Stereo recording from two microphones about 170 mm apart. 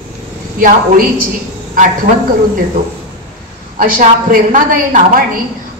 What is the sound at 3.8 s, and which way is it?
A woman's voice, 55° right (ahead or behind).